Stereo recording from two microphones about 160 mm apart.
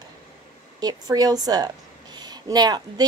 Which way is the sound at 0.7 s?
25° right (ahead or behind).